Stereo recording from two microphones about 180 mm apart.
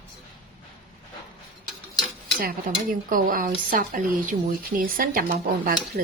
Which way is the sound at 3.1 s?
50° right (ahead or behind).